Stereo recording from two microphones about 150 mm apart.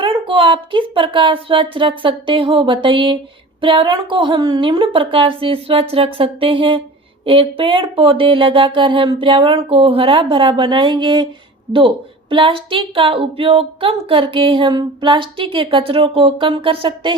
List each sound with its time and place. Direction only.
0.0 s speech: 35° right (ahead or behind)